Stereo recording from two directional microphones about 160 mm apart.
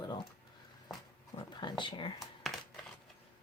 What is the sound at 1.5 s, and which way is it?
Speech, 30° left (ahead or behind).